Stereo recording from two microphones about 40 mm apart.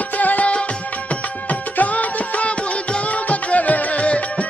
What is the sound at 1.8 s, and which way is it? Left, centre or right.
Music, left.